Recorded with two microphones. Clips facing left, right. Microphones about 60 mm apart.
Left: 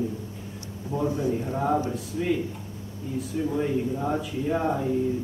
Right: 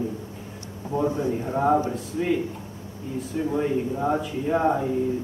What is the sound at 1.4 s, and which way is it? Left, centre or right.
Speech, centre.